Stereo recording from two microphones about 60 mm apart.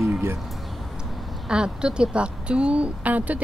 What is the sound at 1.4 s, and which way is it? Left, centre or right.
A woman's voice, centre.